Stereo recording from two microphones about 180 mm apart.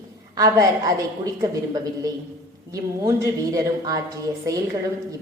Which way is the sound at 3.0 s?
20° right (ahead or behind).